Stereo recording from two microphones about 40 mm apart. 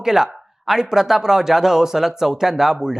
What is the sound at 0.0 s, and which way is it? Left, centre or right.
Speech, centre.